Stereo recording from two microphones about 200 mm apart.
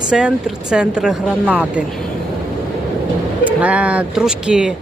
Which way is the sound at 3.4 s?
5° right (ahead or behind).